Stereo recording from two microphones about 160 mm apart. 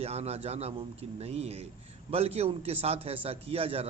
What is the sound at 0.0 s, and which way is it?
A man's voice, 40° right (ahead or behind).